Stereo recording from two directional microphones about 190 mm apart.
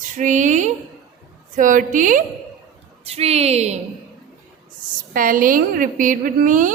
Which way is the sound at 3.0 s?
30° right (ahead or behind).